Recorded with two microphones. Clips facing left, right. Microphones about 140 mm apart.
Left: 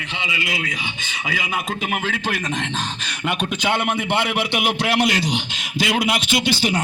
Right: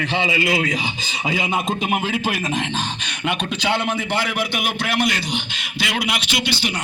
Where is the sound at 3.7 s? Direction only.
20° left (ahead or behind).